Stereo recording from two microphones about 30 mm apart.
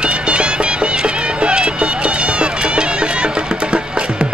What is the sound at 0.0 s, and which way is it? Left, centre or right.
Music, right.